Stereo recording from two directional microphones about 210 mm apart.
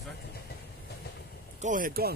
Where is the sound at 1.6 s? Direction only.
40° right (ahead or behind).